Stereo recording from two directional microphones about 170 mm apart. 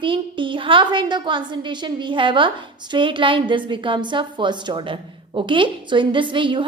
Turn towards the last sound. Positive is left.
turn(degrees=-30)  # may be behind; listen again after turning